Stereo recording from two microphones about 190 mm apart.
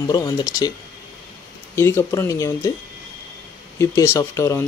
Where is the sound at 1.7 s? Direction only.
15° left (ahead or behind).